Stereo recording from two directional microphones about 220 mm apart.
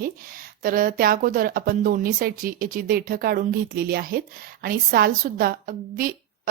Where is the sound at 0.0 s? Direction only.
40° right (ahead or behind).